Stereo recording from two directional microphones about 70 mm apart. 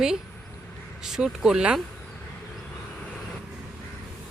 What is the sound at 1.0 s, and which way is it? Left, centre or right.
Speech, centre.